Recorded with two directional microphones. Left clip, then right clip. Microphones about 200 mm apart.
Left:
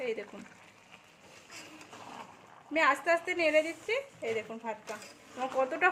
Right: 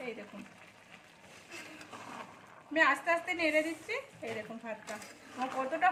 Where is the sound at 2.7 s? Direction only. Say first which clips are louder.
Left 1 dB; 55° left (ahead or behind).